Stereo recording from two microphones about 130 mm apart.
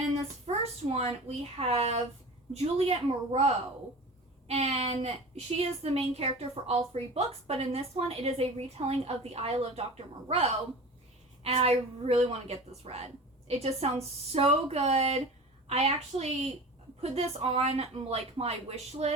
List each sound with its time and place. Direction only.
0.4 s a woman's voice: 50° right (ahead or behind)